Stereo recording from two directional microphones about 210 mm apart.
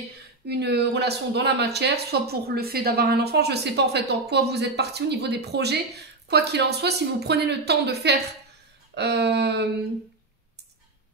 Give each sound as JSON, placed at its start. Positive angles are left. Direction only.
{"t": 0.5, "sound": "speech", "side_deg": -50}